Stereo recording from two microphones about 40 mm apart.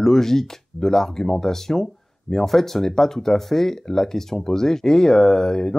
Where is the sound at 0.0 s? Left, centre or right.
Centre.